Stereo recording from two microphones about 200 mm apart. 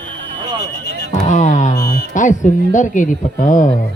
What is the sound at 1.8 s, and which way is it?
Speech, 45° left (ahead or behind).